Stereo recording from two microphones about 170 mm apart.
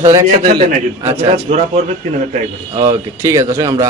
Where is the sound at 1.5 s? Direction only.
40° right (ahead or behind).